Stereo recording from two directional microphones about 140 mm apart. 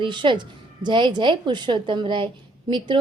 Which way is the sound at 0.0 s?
35° right (ahead or behind).